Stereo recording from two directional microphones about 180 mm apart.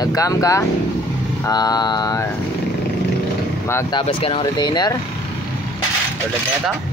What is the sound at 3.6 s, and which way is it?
Speech, 15° left (ahead or behind).